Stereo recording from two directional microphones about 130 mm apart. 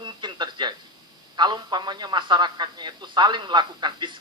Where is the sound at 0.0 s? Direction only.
35° right (ahead or behind).